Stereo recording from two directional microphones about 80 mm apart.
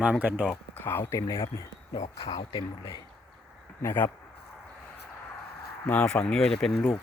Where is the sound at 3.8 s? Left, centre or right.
Left.